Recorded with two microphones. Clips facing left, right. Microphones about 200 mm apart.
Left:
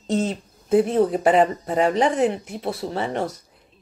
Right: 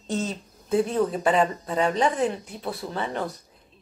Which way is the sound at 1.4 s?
30° left (ahead or behind).